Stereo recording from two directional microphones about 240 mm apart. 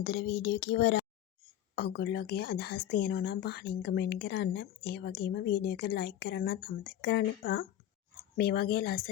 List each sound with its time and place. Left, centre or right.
0.0 s speech: left